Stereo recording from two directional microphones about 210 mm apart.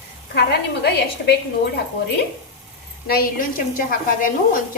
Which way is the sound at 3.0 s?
45° left (ahead or behind).